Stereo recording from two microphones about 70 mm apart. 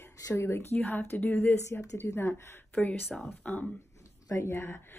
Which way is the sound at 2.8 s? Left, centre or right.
Centre.